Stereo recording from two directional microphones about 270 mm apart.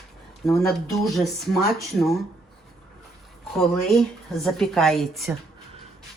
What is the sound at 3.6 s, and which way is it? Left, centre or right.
Speech, centre.